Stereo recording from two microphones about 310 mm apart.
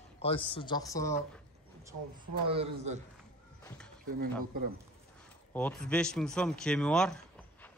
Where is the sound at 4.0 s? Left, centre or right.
Right.